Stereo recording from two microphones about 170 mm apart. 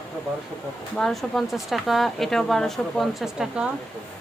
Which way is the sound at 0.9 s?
5° left (ahead or behind).